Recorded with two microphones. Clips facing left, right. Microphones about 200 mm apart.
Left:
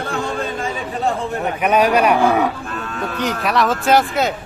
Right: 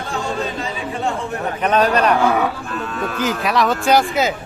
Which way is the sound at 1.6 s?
10° left (ahead or behind).